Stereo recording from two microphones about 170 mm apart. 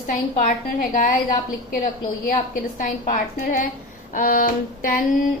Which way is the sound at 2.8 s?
50° left (ahead or behind).